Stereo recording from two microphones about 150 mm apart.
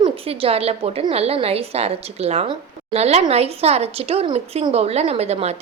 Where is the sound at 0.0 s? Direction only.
40° right (ahead or behind).